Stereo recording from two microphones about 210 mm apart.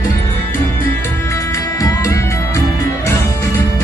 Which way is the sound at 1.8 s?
15° left (ahead or behind).